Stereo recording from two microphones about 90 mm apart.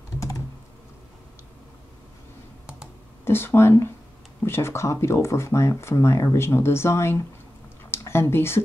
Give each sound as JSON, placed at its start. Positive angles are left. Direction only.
{"t": 3.3, "sound": "speech", "side_deg": 25}